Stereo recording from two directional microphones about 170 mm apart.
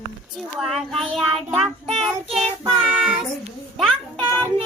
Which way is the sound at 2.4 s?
35° right (ahead or behind).